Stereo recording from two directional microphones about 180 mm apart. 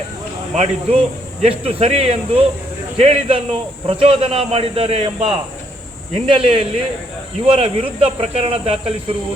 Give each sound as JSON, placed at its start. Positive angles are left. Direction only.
{"t": 0.5, "sound": "a man's voice", "side_deg": -40}